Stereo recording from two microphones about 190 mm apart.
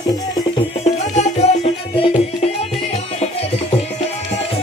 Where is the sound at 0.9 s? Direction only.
35° left (ahead or behind).